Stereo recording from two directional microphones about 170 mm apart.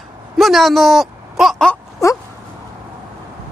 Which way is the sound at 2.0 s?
20° left (ahead or behind).